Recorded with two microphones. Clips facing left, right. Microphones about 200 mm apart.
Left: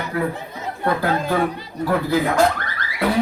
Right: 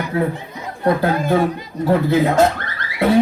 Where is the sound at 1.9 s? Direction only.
25° right (ahead or behind).